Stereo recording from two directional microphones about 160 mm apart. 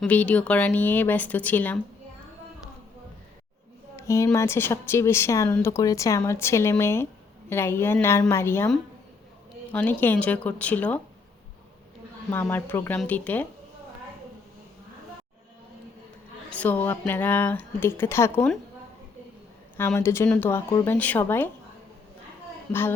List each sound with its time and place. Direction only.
0.0 s speech: 10° left (ahead or behind)
3.9 s speech: 20° left (ahead or behind)
9.7 s speech: 10° left (ahead or behind)
12.3 s speech: 15° left (ahead or behind)
16.5 s speech: 10° left (ahead or behind)
20.0 s speech: 15° left (ahead or behind)
22.7 s speech: 15° left (ahead or behind)